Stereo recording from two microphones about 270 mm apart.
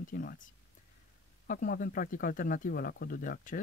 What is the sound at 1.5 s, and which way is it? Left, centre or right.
Speech, left.